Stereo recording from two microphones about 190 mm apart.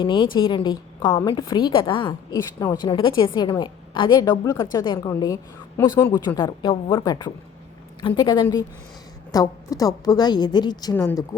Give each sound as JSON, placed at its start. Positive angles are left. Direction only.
{"t": 0.0, "sound": "a woman's voice", "side_deg": 25}